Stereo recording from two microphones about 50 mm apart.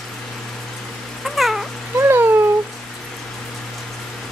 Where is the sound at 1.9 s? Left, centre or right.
Right.